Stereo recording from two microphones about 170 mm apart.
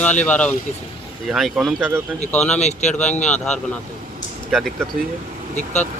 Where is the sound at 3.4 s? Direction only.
10° left (ahead or behind).